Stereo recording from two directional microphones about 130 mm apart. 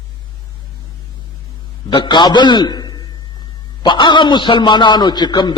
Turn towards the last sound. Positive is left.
turn(degrees=35)  # may be behind; listen again after turning